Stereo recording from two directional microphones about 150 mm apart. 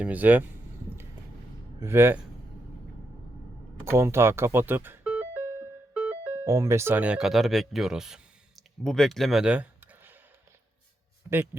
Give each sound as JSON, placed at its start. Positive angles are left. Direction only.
{"t": 0.0, "sound": "speech", "side_deg": -10}
{"t": 1.8, "sound": "speech", "side_deg": -15}
{"t": 3.8, "sound": "speech", "side_deg": -15}
{"t": 5.9, "sound": "music", "side_deg": -10}
{"t": 6.4, "sound": "speech", "side_deg": -20}